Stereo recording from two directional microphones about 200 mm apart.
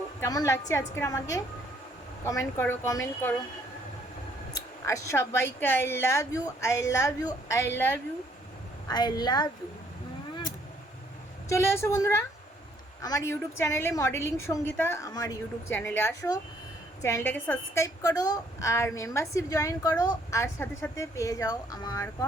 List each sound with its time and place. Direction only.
0.2 s a woman's voice: 15° left (ahead or behind)
4.9 s a woman's voice: 15° left (ahead or behind)
8.9 s a woman's voice: 20° left (ahead or behind)
11.4 s a woman's voice: 15° left (ahead or behind)